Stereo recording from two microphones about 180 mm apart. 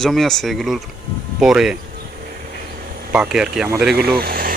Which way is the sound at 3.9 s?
60° right (ahead or behind).